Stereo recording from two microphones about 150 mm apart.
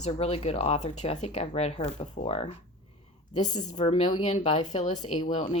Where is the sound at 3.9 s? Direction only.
35° left (ahead or behind); by 5.4 s 55° left (ahead or behind).